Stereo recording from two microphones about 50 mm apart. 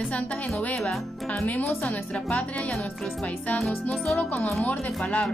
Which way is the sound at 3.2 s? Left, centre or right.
Left.